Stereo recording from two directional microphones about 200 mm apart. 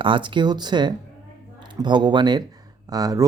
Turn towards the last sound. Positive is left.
turn(degrees=-20)  # may be behind; listen again after turning